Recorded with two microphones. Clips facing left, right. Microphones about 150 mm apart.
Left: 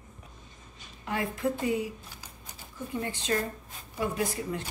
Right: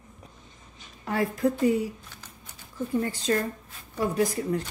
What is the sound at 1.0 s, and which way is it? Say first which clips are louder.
Speech: right 5 dB; 40° right (ahead or behind).